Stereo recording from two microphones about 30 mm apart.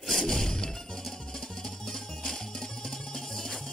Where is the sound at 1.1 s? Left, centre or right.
Left.